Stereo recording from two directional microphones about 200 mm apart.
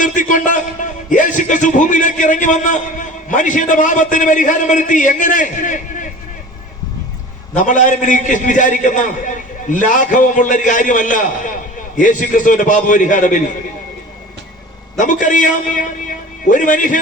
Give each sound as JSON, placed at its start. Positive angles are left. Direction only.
{"t": 0.0, "sound": "a sound", "side_deg": 40}
{"t": 7.5, "sound": "a man's voice", "side_deg": 40}
{"t": 14.9, "sound": "a man's voice", "side_deg": 40}